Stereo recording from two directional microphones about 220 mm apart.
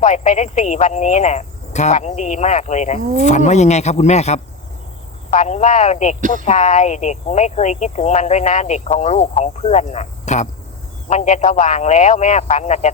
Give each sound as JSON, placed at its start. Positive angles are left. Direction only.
{"t": 0.0, "sound": "speech", "side_deg": 30}
{"t": 6.1, "sound": "speech", "side_deg": -35}
{"t": 6.4, "sound": "speech", "side_deg": 35}